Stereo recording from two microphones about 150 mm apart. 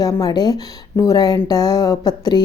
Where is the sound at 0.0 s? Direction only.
25° left (ahead or behind).